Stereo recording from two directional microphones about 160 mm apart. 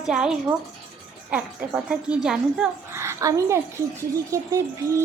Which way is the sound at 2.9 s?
15° right (ahead or behind).